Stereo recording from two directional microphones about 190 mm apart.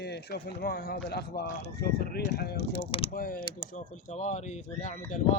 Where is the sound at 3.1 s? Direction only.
50° left (ahead or behind).